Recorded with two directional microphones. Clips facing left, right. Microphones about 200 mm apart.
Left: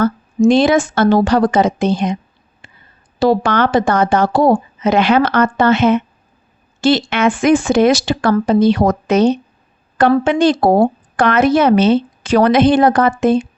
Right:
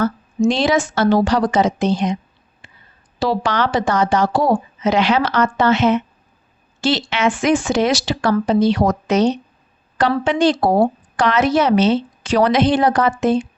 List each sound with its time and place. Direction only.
0.0 s speech: 55° left (ahead or behind)
2.6 s a sound: 55° left (ahead or behind)
3.2 s speech: 50° left (ahead or behind)